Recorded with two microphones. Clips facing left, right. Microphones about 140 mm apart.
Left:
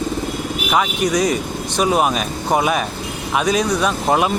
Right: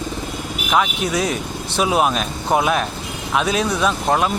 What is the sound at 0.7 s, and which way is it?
Speech, centre (ahead or behind).